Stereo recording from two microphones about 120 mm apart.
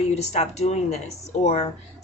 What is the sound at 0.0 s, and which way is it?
Speech, 65° left (ahead or behind).